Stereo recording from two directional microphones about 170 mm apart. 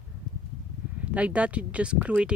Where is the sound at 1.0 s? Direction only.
5° right (ahead or behind).